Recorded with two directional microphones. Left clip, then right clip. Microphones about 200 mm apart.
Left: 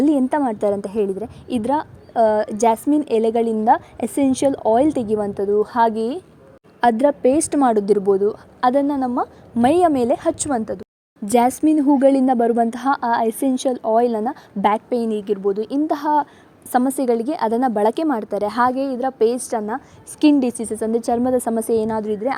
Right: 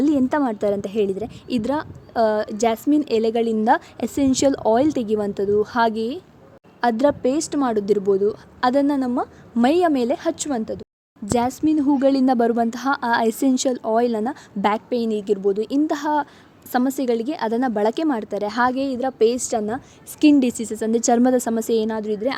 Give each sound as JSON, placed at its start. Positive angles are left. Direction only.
{"t": 0.0, "sound": "a woman's voice", "side_deg": 5}
{"t": 3.6, "sound": "a woman's voice", "side_deg": -10}
{"t": 3.9, "sound": "a woman's voice", "side_deg": 10}
{"t": 4.4, "sound": "a woman's voice", "side_deg": -5}
{"t": 7.3, "sound": "a woman's voice", "side_deg": 25}
{"t": 20.9, "sound": "a woman's voice", "side_deg": -15}
{"t": 21.3, "sound": "a woman's voice", "side_deg": 0}